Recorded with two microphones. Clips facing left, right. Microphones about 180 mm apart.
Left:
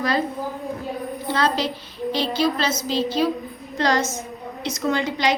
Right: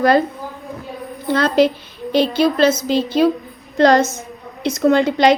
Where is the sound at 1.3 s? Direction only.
55° right (ahead or behind).